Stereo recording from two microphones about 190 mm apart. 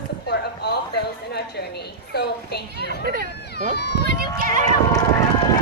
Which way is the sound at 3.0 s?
50° right (ahead or behind).